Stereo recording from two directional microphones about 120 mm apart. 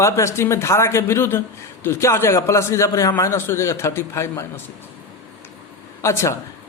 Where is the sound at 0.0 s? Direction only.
25° left (ahead or behind).